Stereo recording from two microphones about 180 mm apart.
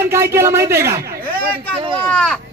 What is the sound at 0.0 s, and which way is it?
A man's voice, 15° right (ahead or behind).